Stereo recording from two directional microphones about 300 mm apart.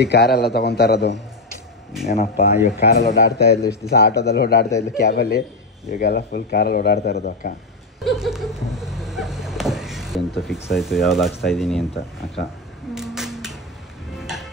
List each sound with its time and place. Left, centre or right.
0.0 s a man's voice: left
2.1 s speech: centre
2.8 s a man's voice: left
8.0 s a sound: centre
12.9 s a sound: centre
14.1 s music: centre